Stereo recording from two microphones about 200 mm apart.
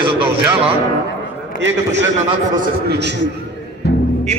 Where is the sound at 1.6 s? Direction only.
65° right (ahead or behind).